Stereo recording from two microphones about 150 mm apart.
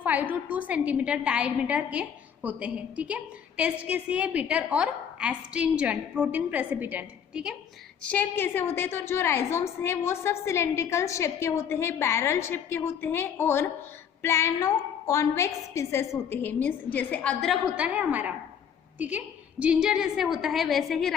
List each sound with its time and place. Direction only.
0.0 s a woman's voice: 10° right (ahead or behind)
8.0 s a woman's voice: 10° left (ahead or behind)
17.4 s a woman's voice: 5° right (ahead or behind)